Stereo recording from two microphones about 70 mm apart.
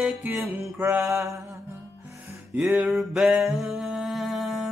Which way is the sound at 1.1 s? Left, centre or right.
Right.